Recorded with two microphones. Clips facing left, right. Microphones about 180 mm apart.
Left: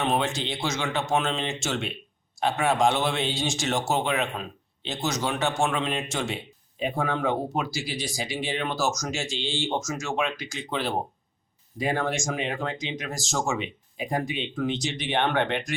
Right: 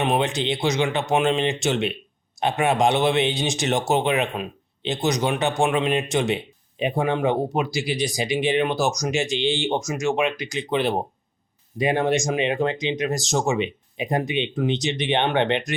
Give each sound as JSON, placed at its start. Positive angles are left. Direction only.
{"t": 0.0, "sound": "speech", "side_deg": -15}